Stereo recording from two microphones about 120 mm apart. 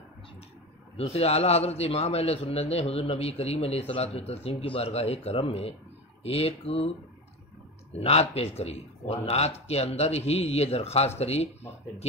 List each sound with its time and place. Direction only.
0.9 s a man's voice: 55° left (ahead or behind)
7.9 s a man's voice: 60° left (ahead or behind)